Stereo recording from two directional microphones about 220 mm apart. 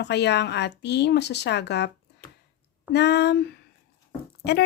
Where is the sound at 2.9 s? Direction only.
50° left (ahead or behind).